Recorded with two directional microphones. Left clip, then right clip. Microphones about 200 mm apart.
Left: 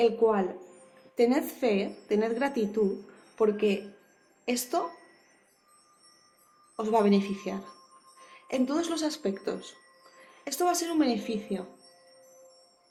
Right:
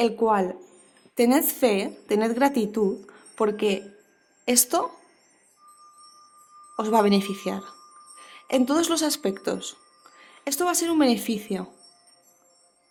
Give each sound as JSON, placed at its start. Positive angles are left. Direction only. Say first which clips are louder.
{"t": 0.0, "sound": "a woman's voice", "louder": "right 2 dB", "side_deg": -65}
{"t": 6.7, "sound": "a woman's voice", "louder": "right 4 dB", "side_deg": -60}